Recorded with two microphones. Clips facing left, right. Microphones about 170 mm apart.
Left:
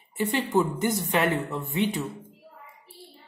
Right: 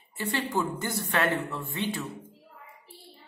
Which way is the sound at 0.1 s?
20° left (ahead or behind).